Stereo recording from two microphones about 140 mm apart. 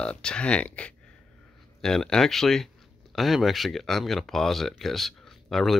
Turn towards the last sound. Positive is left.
turn(degrees=0)  # may be behind; listen again after turning